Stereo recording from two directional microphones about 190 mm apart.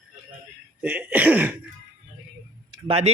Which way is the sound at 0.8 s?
5° right (ahead or behind).